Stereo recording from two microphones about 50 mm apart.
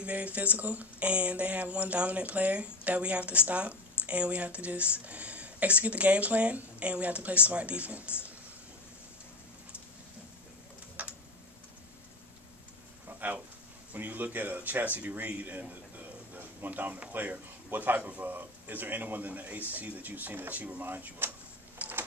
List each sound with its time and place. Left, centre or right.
0.0 s speech: right
11.0 s computer keyboard: right
13.2 s a man's voice: right
21.8 s printer: right